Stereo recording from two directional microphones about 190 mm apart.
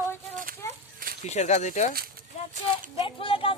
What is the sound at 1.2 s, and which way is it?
Speech, 35° left (ahead or behind).